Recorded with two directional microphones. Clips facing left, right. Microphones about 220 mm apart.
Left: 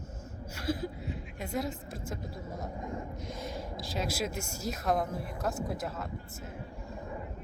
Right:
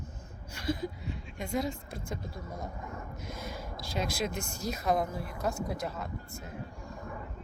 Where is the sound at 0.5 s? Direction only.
5° left (ahead or behind).